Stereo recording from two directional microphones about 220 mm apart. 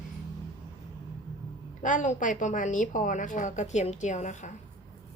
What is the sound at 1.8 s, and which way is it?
A woman's voice, 35° left (ahead or behind).